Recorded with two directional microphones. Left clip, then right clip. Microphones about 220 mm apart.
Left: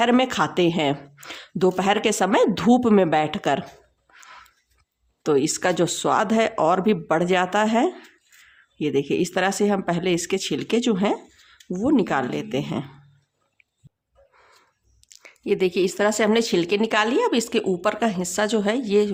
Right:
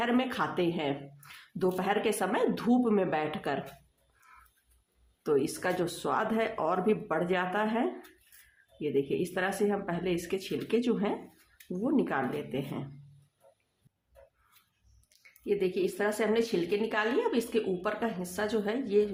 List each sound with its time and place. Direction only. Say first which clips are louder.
0.0 s speech: left 10 dB; 35° left (ahead or behind)
5.2 s speech: left 8 dB; 35° left (ahead or behind)
15.1 s speech: left 7 dB; 40° left (ahead or behind)